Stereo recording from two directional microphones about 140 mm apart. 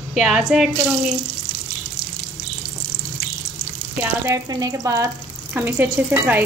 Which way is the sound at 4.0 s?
20° right (ahead or behind).